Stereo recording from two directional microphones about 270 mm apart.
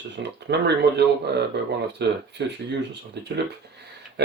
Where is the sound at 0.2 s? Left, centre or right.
Right.